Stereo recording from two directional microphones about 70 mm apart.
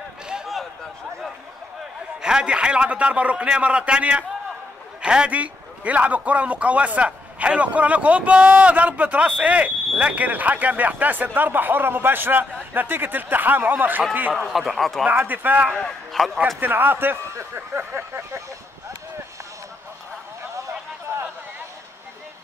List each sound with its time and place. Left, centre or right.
2.2 s a man's voice: centre
14.3 s speech: centre
15.0 s a man's voice: right
15.7 s speech: centre
16.5 s a man's voice: right
17.6 s a sound: right